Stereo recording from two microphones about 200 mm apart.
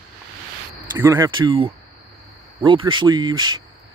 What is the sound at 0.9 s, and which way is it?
Speech, 15° right (ahead or behind).